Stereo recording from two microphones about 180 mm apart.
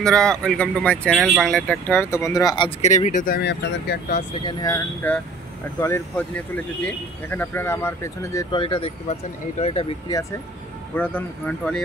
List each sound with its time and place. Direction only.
0.0 s speech: 5° left (ahead or behind); by 2.7 s 25° left (ahead or behind)
2.8 s speech: 40° left (ahead or behind)
3.3 s speech: 65° left (ahead or behind)
4.5 s speech: 20° left (ahead or behind)
8.5 s speech: 30° left (ahead or behind)
11.0 s speech: 10° left (ahead or behind)